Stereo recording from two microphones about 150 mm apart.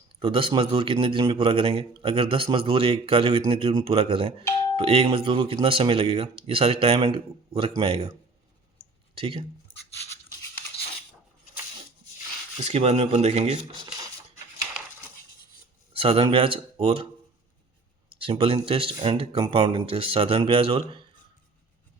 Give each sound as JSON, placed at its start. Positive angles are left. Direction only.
{"t": 0.2, "sound": "speech", "side_deg": -35}
{"t": 9.1, "sound": "speech", "side_deg": -40}
{"t": 12.5, "sound": "speech", "side_deg": -45}
{"t": 15.9, "sound": "speech", "side_deg": -40}
{"t": 18.2, "sound": "speech", "side_deg": -40}